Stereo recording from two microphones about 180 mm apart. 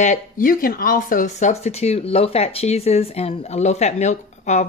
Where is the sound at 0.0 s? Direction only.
50° left (ahead or behind).